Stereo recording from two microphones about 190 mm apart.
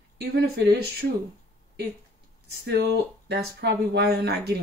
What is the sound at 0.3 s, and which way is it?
Speech, 55° right (ahead or behind).